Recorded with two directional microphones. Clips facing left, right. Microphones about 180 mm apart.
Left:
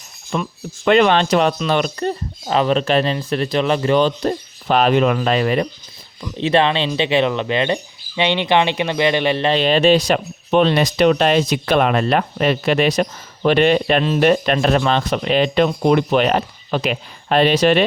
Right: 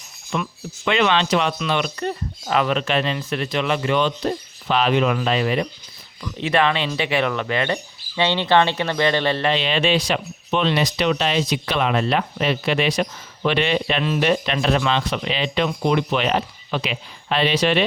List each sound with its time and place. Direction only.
0.3 s speech: 40° left (ahead or behind)
6.3 s speech: 30° left (ahead or behind)
9.5 s speech: 40° left (ahead or behind)